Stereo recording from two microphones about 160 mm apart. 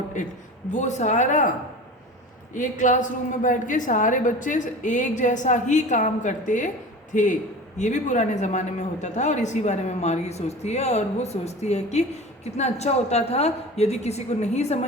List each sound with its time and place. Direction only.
0.7 s a woman's voice: 50° left (ahead or behind)
2.5 s a woman's voice: 50° left (ahead or behind)